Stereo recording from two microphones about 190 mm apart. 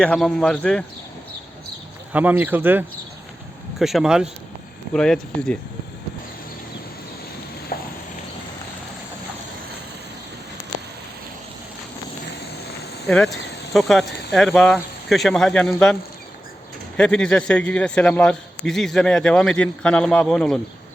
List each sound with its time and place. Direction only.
0.0 s a man's voice: 5° left (ahead or behind)
2.1 s a man's voice: 5° right (ahead or behind)
7.7 s a sound: 50° left (ahead or behind)
13.1 s a man's voice: 5° left (ahead or behind)
17.0 s a man's voice: 5° left (ahead or behind)